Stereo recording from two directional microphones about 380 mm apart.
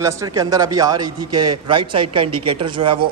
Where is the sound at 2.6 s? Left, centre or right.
Centre.